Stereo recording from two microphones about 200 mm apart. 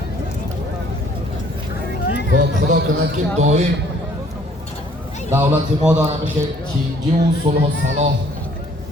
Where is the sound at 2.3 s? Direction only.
50° right (ahead or behind).